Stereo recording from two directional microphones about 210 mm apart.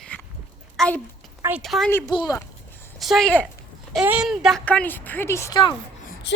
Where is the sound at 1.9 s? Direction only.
10° left (ahead or behind).